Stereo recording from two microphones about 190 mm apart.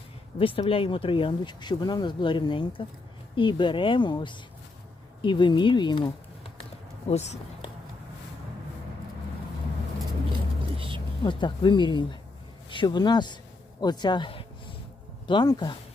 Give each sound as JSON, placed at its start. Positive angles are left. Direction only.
{"t": 0.3, "sound": "speech", "side_deg": 30}
{"t": 7.1, "sound": "speech", "side_deg": 35}
{"t": 10.8, "sound": "a sound", "side_deg": -25}
{"t": 11.2, "sound": "speech", "side_deg": 25}
{"t": 13.8, "sound": "a sound", "side_deg": 20}
{"t": 15.3, "sound": "speech", "side_deg": 25}